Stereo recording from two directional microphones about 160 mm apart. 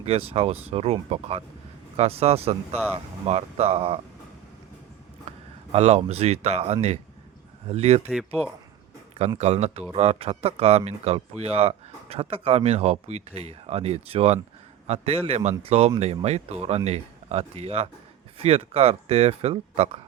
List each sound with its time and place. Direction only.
0.0 s speech: 40° right (ahead or behind)
5.7 s speech: 40° right (ahead or behind)
9.4 s speech: 40° right (ahead or behind)